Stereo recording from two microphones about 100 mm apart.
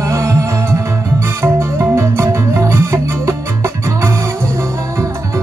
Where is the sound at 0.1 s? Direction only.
30° right (ahead or behind).